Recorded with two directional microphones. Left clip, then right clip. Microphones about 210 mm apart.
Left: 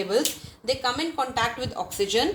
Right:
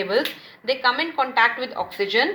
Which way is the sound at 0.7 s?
30° left (ahead or behind).